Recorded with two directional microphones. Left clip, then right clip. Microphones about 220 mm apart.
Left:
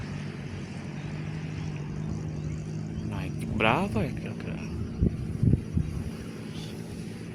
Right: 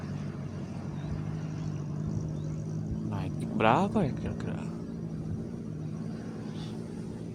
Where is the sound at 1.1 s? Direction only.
50° right (ahead or behind).